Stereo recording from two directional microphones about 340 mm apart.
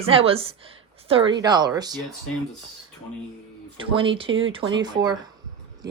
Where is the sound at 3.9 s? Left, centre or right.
Centre.